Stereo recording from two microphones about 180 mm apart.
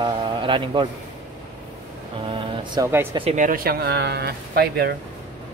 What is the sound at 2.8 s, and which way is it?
Speech, 20° right (ahead or behind).